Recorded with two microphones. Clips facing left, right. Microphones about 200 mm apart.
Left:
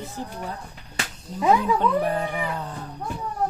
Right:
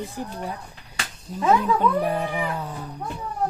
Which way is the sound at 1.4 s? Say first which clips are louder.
Even; 10° left (ahead or behind).